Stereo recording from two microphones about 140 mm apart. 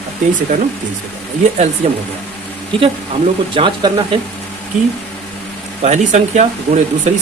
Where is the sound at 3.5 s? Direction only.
35° right (ahead or behind).